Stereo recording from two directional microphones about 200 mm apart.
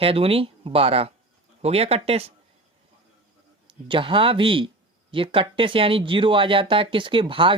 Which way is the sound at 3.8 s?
25° right (ahead or behind).